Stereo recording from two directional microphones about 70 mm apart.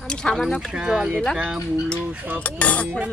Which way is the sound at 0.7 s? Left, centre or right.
Centre.